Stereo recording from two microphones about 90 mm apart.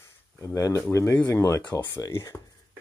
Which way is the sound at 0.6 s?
40° left (ahead or behind).